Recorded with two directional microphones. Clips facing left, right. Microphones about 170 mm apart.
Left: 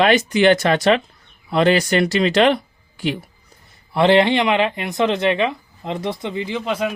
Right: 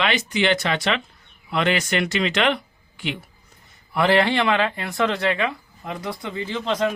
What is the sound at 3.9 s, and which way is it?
Speech, 25° left (ahead or behind).